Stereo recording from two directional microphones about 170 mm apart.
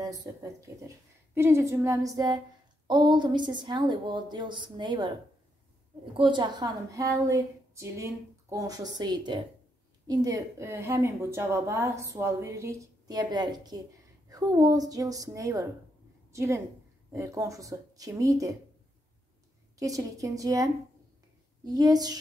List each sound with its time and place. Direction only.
0.2 s a woman's voice: 20° right (ahead or behind)
6.1 s a woman's voice: 30° right (ahead or behind)
19.8 s a woman's voice: 20° right (ahead or behind)